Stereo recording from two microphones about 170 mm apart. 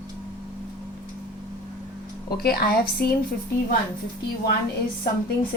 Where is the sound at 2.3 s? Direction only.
65° left (ahead or behind).